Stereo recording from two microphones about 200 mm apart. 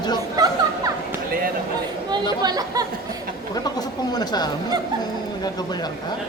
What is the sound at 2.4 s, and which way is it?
Speech, 20° right (ahead or behind).